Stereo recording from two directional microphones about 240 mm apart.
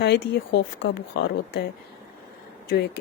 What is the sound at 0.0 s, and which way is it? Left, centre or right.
Speech, left.